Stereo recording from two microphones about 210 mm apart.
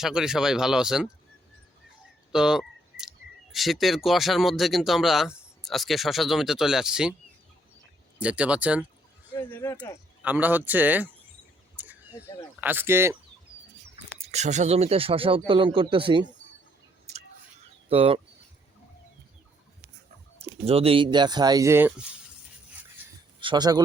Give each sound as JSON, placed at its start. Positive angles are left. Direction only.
{"t": 0.0, "sound": "speech", "side_deg": -5}
{"t": 2.3, "sound": "speech", "side_deg": -5}
{"t": 8.2, "sound": "speech", "side_deg": -5}
{"t": 9.3, "sound": "speech", "side_deg": 10}
{"t": 10.2, "sound": "speech", "side_deg": -10}
{"t": 11.8, "sound": "a sound", "side_deg": -5}
{"t": 12.5, "sound": "speech", "side_deg": -10}
{"t": 14.3, "sound": "speech", "side_deg": -35}
{"t": 17.8, "sound": "speech", "side_deg": -25}
{"t": 20.4, "sound": "speech", "side_deg": -30}
{"t": 23.4, "sound": "speech", "side_deg": -20}